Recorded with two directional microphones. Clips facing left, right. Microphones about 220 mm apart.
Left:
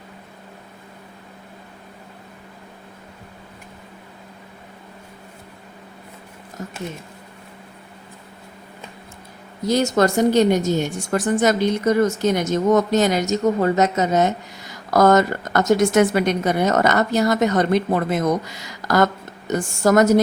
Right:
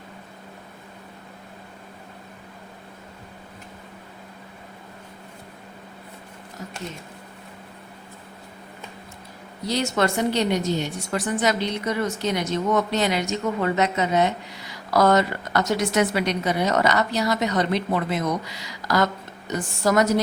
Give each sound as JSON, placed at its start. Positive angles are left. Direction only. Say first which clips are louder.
{"t": 6.6, "sound": "speech", "louder": "left 5 dB", "side_deg": 50}
{"t": 9.6, "sound": "a woman's voice", "louder": "left 5 dB", "side_deg": 45}